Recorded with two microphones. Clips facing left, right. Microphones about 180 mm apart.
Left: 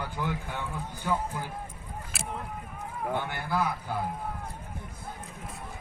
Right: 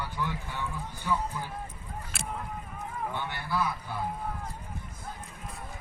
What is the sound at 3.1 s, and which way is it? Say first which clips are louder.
Speech: left 4 dB; 50° left (ahead or behind).